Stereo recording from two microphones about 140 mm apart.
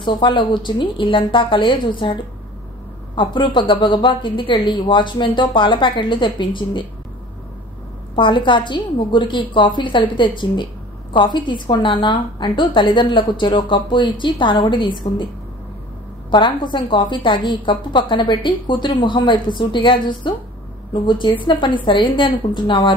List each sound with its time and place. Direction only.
0.0 s a woman's voice: 35° left (ahead or behind)
8.2 s a woman's voice: 35° left (ahead or behind)
16.3 s a woman's voice: 35° left (ahead or behind)